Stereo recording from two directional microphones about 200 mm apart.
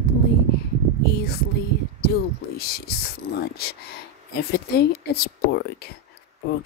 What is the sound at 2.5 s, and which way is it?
Speech, 50° left (ahead or behind).